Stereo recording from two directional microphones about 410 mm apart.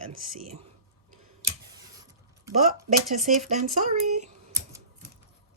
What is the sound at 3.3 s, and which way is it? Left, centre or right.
Speech, centre.